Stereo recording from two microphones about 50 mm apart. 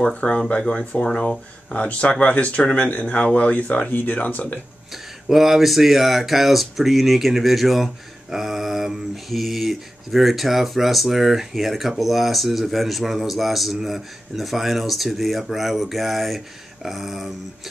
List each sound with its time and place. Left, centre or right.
0.0 s speech: left
4.9 s speech: centre